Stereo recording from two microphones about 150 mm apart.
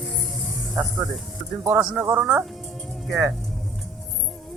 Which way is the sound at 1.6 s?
20° right (ahead or behind).